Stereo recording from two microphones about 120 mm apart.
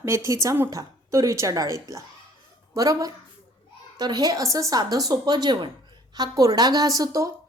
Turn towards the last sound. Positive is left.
turn(degrees=-30)  # may be behind; listen again after turning